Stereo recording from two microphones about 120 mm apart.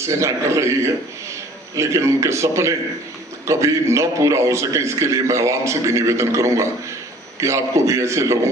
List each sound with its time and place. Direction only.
0.0 s a man's voice: 25° right (ahead or behind)